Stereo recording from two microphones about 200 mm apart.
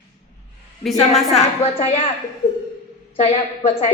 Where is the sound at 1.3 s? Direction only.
30° left (ahead or behind).